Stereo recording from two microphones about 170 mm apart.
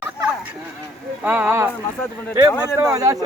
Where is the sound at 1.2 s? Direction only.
10° right (ahead or behind).